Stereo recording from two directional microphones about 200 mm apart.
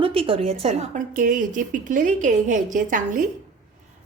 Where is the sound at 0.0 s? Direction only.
25° right (ahead or behind).